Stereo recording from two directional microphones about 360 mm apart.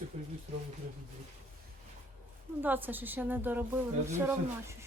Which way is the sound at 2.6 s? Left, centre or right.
Centre.